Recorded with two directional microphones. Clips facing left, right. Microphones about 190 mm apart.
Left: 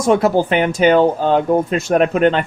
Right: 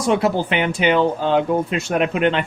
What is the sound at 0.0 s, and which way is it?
Speech, 45° left (ahead or behind).